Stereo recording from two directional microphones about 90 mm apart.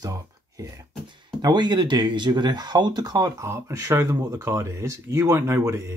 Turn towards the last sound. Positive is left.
turn(degrees=-30)  # may be behind; listen again after turning